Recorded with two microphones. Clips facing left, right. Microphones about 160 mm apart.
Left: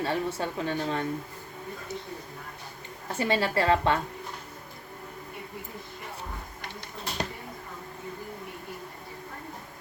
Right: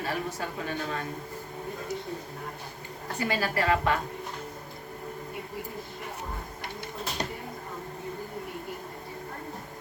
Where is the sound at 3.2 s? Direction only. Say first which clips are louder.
Left 3 dB; 25° left (ahead or behind).